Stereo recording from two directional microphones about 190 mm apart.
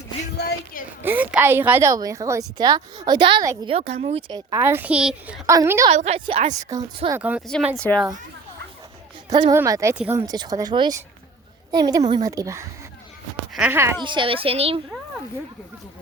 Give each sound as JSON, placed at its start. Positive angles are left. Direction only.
{"t": 0.3, "sound": "a sound", "side_deg": 50}
{"t": 1.0, "sound": "speech", "side_deg": -10}
{"t": 3.7, "sound": "speech", "side_deg": -35}
{"t": 5.9, "sound": "a woman's voice", "side_deg": -35}
{"t": 6.5, "sound": "speech", "side_deg": -20}
{"t": 7.2, "sound": "speech", "side_deg": -5}
{"t": 9.3, "sound": "speech", "side_deg": -20}
{"t": 10.2, "sound": "speech", "side_deg": -20}
{"t": 14.0, "sound": "speech", "side_deg": -25}